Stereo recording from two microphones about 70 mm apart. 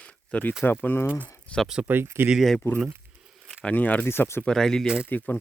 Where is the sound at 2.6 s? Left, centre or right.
Left.